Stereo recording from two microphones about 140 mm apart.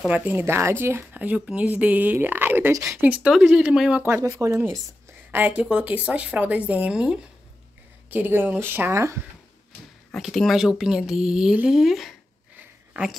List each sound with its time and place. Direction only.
0.1 s speech: 10° right (ahead or behind)
4.0 s speech: 20° right (ahead or behind)
10.1 s speech: centre (ahead or behind)